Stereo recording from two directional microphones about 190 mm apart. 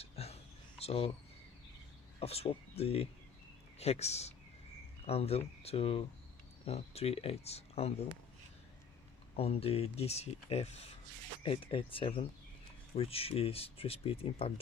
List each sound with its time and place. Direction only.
0.0 s a sound: 30° left (ahead or behind)
0.8 s speech: 30° left (ahead or behind)
2.1 s speech: 30° left (ahead or behind)
9.3 s speech: 30° left (ahead or behind)